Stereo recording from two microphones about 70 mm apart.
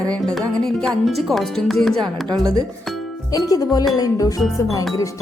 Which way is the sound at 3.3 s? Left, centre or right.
Left.